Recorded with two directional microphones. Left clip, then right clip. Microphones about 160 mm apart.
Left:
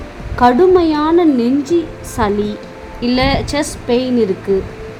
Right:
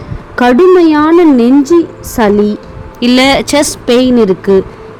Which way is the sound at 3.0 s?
45° right (ahead or behind).